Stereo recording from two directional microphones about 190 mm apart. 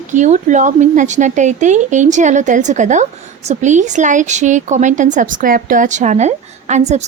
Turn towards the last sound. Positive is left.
turn(degrees=-35)  # may be behind; listen again after turning